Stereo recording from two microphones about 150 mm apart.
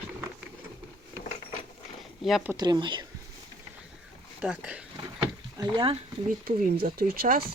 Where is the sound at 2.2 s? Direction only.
Centre (ahead or behind).